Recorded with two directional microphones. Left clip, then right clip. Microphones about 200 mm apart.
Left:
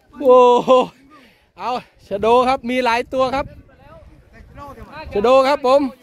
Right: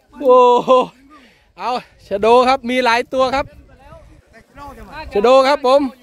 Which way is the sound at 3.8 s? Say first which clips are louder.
Right 5 dB; 55° right (ahead or behind).